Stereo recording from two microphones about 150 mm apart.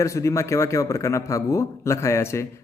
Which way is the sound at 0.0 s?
20° left (ahead or behind).